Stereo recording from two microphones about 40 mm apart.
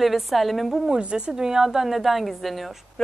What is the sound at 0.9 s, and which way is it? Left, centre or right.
A woman's voice, right.